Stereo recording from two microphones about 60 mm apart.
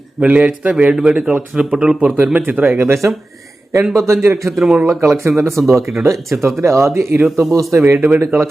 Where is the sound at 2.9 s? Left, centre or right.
Right.